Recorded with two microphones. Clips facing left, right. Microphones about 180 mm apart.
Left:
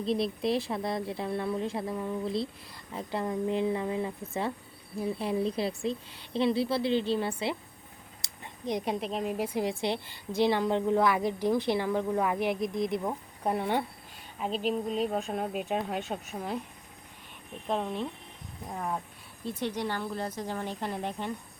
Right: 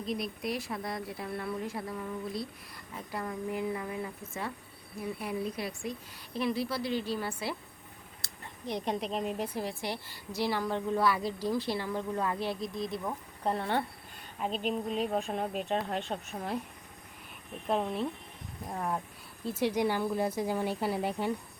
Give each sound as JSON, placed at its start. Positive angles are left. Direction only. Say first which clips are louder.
{"t": 0.0, "sound": "speech", "louder": "left 6 dB", "side_deg": 30}
{"t": 8.6, "sound": "a woman's voice", "louder": "left 2 dB", "side_deg": 10}
{"t": 14.3, "sound": "speech", "louder": "left 2 dB", "side_deg": 0}
{"t": 17.7, "sound": "speech", "louder": "right 1 dB", "side_deg": -5}